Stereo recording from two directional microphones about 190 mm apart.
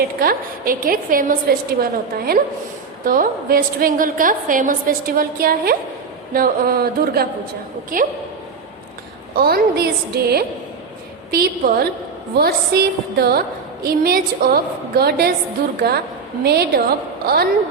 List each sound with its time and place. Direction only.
0.2 s a woman's voice: 50° right (ahead or behind)
9.3 s a woman's voice: 55° right (ahead or behind)
16.4 s a woman's voice: 55° right (ahead or behind)